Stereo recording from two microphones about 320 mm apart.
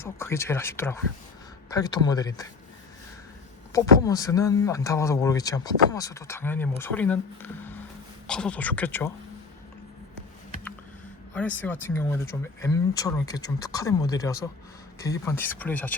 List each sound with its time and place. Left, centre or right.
0.0 s speech: centre
3.7 s speech: centre
11.3 s speech: centre